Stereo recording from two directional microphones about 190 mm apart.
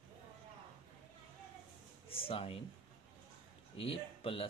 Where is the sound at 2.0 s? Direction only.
30° left (ahead or behind).